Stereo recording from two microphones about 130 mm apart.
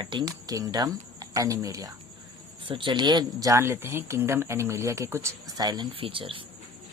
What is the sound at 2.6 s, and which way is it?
Speech, 40° right (ahead or behind).